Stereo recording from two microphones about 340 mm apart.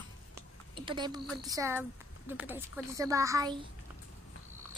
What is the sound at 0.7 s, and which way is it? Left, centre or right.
A woman's voice, centre.